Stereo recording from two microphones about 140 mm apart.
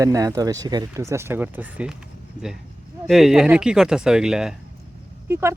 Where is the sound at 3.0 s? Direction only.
Centre (ahead or behind).